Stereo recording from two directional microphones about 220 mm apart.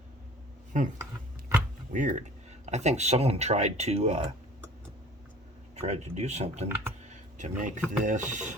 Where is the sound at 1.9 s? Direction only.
35° right (ahead or behind).